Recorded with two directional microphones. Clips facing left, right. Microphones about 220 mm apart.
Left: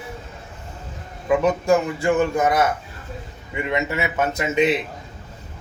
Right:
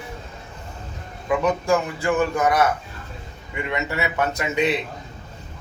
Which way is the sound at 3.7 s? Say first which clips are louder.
Left 2 dB; 20° left (ahead or behind).